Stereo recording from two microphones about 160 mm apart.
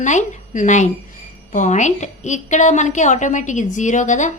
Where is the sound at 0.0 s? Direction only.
50° left (ahead or behind).